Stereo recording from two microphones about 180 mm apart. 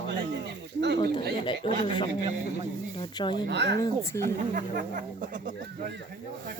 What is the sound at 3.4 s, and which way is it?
Speech, 70° right (ahead or behind).